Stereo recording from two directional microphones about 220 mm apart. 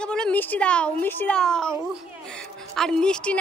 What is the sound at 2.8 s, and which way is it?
Speech, 5° left (ahead or behind).